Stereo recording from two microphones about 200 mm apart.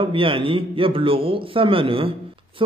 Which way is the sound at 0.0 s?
25° right (ahead or behind).